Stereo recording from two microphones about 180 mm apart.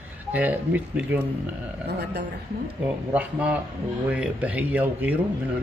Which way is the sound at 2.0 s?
70° right (ahead or behind).